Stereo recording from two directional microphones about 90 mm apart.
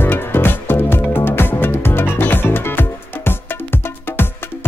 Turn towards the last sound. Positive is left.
turn(degrees=25)  # may be behind; listen again after turning